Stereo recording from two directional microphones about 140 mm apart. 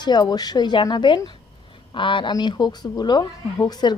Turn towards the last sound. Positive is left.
turn(degrees=30)  # may be behind; listen again after turning